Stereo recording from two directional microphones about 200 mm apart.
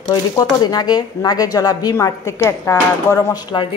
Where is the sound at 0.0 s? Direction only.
20° left (ahead or behind).